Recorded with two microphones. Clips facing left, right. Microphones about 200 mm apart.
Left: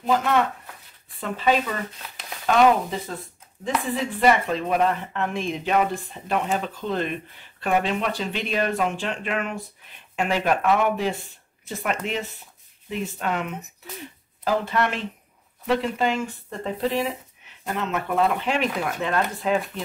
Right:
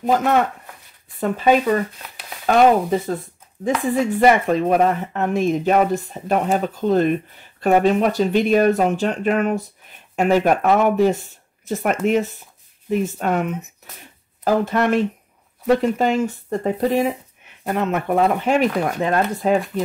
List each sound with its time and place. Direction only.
0.0 s speech: 45° right (ahead or behind)